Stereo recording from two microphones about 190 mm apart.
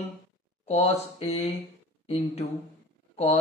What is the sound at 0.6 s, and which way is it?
A man's voice, 35° left (ahead or behind).